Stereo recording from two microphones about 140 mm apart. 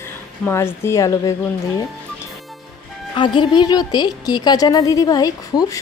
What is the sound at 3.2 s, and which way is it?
A woman's voice, 30° left (ahead or behind).